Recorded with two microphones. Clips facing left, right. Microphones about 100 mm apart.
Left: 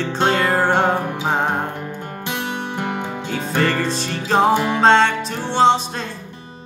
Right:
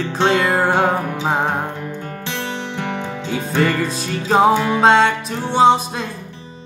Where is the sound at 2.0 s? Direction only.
15° left (ahead or behind).